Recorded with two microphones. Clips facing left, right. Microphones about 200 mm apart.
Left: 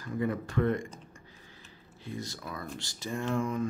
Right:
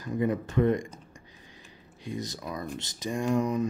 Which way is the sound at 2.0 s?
20° right (ahead or behind).